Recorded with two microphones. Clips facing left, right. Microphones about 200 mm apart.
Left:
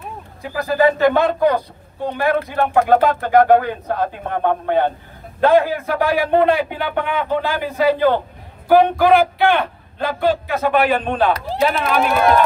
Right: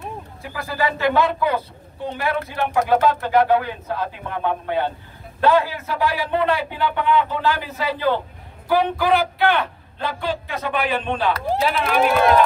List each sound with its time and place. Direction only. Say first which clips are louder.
0.8 s speech: left 4 dB; 55° left (ahead or behind)